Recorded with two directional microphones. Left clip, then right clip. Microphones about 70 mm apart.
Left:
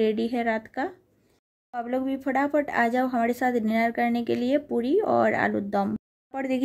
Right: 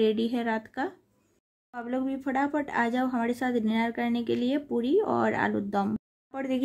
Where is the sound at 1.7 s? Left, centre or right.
Left.